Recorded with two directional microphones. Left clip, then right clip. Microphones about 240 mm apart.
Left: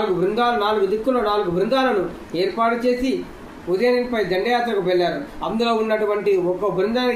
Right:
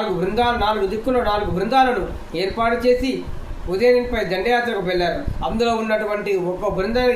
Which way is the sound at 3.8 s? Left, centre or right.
Centre.